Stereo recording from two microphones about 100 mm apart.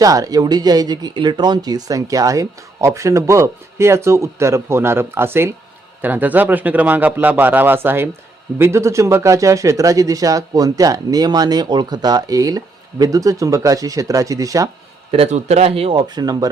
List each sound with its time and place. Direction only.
0.0 s a man's voice: 35° right (ahead or behind)
15.1 s speech: 85° right
16.0 s speech: 45° right (ahead or behind)